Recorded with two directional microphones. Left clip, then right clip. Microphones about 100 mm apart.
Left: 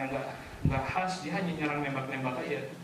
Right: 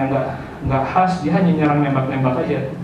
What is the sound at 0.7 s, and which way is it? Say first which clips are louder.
A man's voice: right 15 dB; 15° left (ahead or behind).